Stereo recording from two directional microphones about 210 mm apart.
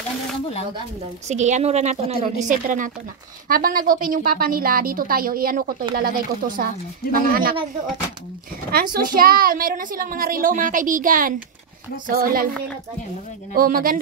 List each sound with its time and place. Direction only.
1.3 s a woman's voice: 35° right (ahead or behind)
8.9 s a woman's voice: 45° right (ahead or behind)